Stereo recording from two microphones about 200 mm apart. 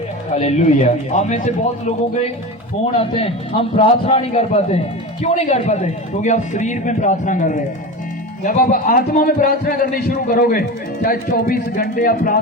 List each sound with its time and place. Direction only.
0.3 s a man's voice: 35° left (ahead or behind)
3.0 s a man's voice: 25° left (ahead or behind); by 12.4 s 45° left (ahead or behind)